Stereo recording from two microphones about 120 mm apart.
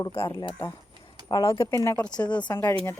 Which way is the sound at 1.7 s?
25° left (ahead or behind).